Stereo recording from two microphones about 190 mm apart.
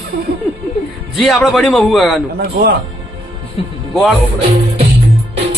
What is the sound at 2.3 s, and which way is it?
Speech, 55° right (ahead or behind).